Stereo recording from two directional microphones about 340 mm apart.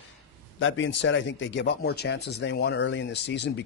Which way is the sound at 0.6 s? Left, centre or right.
Left.